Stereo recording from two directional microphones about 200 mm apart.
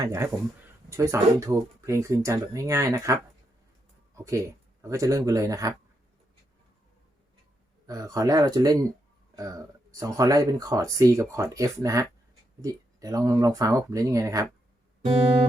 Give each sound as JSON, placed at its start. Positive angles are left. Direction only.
{"t": 0.0, "sound": "speech", "side_deg": -15}
{"t": 7.9, "sound": "speech", "side_deg": -15}